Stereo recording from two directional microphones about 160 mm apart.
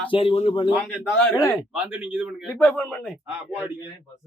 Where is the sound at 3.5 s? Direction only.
10° right (ahead or behind).